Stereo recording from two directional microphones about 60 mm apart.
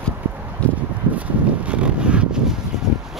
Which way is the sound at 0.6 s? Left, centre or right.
Centre.